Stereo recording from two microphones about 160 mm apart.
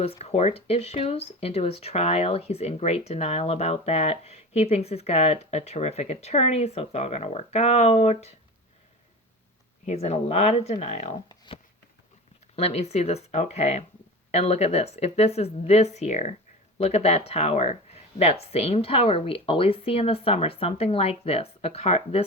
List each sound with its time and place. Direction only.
0.0 s speech: 40° left (ahead or behind)
9.8 s speech: 40° left (ahead or behind)
11.3 s a sound: 30° left (ahead or behind)
12.5 s speech: 40° left (ahead or behind)